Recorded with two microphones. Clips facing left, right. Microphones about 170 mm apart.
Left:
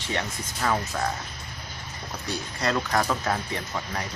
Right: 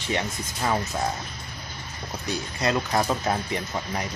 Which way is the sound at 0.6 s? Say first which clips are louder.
Even; 15° right (ahead or behind).